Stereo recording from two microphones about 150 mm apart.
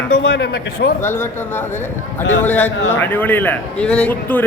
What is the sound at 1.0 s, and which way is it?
A man's voice, 15° left (ahead or behind).